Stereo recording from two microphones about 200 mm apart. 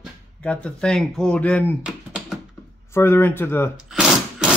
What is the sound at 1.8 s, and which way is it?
Computer keyboard, 5° right (ahead or behind).